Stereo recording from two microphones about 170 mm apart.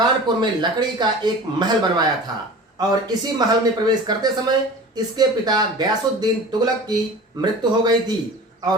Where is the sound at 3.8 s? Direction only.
25° right (ahead or behind).